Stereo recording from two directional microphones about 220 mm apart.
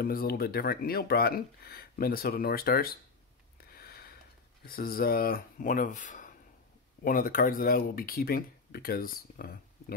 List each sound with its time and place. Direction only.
0.0 s speech: 45° left (ahead or behind)
3.6 s a sound: 45° left (ahead or behind)
4.6 s speech: 40° left (ahead or behind)